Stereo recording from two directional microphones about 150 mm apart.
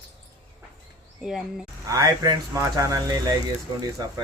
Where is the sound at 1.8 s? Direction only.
25° right (ahead or behind).